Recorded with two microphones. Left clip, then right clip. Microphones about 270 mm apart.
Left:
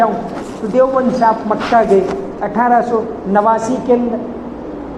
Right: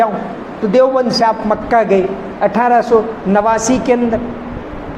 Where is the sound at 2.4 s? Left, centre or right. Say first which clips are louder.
Right 2 dB; right.